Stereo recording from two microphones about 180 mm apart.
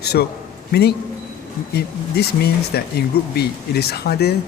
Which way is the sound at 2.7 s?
60° left (ahead or behind).